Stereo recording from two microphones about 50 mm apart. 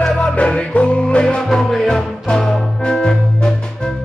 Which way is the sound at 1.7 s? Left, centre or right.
Centre.